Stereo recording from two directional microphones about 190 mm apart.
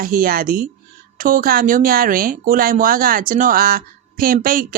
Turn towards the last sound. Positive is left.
turn(degrees=-50)  # may be behind; listen again after turning